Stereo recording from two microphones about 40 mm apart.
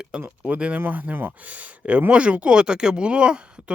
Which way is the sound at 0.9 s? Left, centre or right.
Right.